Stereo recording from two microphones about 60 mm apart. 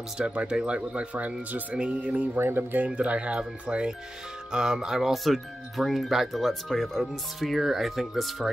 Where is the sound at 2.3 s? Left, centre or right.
Right.